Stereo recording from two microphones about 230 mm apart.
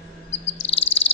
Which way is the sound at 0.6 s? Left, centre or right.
Left.